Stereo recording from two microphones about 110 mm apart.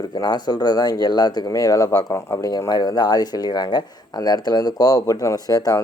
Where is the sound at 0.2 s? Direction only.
40° left (ahead or behind).